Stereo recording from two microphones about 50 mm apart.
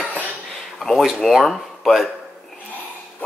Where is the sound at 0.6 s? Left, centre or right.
Centre.